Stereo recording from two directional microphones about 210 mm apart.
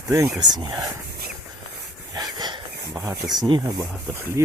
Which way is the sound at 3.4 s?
20° right (ahead or behind).